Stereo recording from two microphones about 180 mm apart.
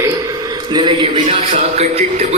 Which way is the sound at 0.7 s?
25° right (ahead or behind).